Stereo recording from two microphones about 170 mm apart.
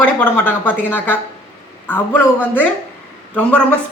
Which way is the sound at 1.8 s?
10° left (ahead or behind).